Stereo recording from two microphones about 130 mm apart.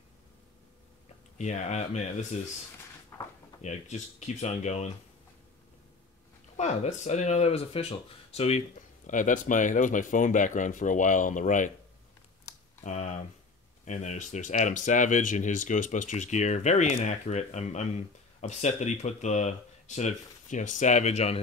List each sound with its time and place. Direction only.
1.4 s speech: 65° left (ahead or behind)
3.1 s a sound: 20° left (ahead or behind)
3.6 s speech: 65° left (ahead or behind)
6.5 s speech: 60° left (ahead or behind)
12.8 s a sound: 65° left (ahead or behind)
13.8 s speech: 65° left (ahead or behind)